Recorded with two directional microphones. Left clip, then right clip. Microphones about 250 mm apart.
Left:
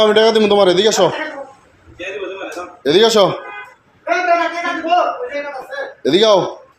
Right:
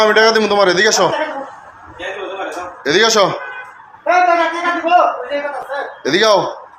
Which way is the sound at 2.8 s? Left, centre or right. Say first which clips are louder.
Left 1 dB; left.